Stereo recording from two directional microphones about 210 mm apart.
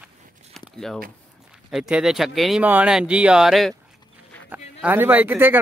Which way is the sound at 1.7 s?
5° right (ahead or behind).